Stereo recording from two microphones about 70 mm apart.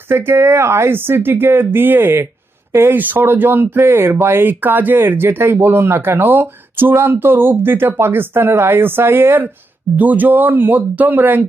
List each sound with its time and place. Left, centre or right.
0.1 s speech: right